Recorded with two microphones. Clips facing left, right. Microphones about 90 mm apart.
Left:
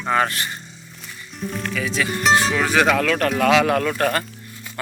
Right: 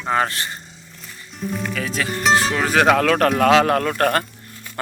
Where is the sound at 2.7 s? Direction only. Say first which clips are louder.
Right 4 dB; 50° right (ahead or behind).